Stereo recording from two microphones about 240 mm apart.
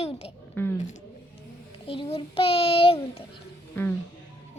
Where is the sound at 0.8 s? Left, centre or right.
Left.